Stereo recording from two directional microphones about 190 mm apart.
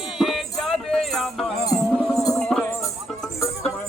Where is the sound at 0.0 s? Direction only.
Centre (ahead or behind).